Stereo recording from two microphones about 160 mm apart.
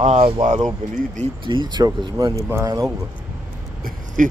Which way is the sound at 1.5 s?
30° right (ahead or behind).